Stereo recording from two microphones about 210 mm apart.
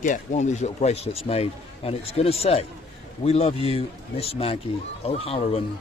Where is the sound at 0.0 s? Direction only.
35° left (ahead or behind).